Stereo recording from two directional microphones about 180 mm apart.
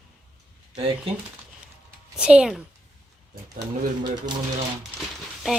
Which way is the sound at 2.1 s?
5° right (ahead or behind).